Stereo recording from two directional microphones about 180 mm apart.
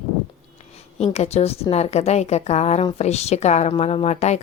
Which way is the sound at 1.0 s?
35° left (ahead or behind).